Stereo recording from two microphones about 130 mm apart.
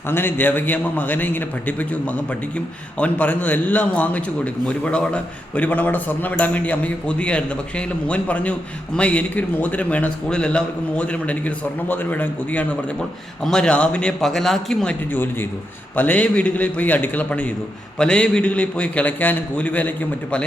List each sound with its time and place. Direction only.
0.1 s a man's voice: 15° left (ahead or behind)
15.1 s a man's voice: 15° left (ahead or behind)